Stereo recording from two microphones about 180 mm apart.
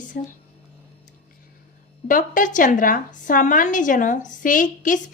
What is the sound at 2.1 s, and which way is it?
A woman's voice, 45° left (ahead or behind).